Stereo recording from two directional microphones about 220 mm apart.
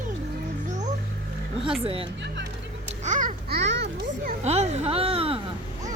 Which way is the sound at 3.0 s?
35° right (ahead or behind).